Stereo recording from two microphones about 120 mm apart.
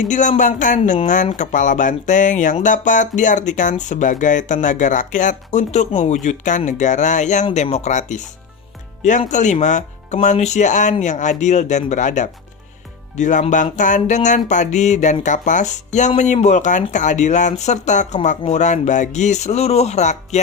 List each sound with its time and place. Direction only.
0.1 s speech: 90° left; by 6.1 s 70° left (ahead or behind)
6.2 s speech: 90° left
7.5 s speech: 65° left (ahead or behind)